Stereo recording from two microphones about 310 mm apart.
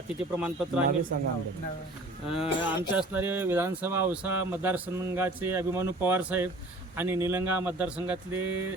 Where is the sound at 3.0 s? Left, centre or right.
Centre.